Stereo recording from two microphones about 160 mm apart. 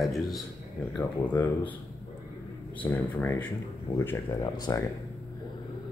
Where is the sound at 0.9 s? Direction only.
10° left (ahead or behind).